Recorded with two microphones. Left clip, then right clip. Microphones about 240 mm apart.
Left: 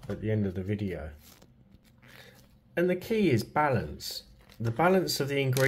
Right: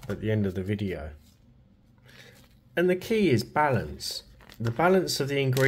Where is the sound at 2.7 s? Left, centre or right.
Centre.